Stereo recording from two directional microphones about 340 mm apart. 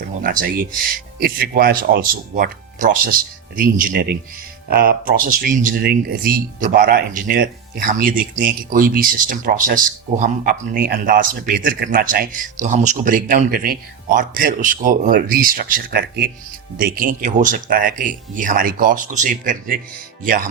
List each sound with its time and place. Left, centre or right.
0.1 s speech: right